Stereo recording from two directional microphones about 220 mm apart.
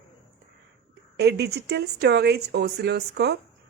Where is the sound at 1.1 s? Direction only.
50° right (ahead or behind).